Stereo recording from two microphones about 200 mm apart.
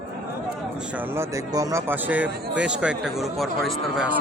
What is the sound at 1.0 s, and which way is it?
Speech, 15° right (ahead or behind).